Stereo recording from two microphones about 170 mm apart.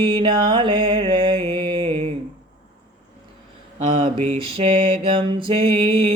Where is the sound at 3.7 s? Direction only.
45° right (ahead or behind).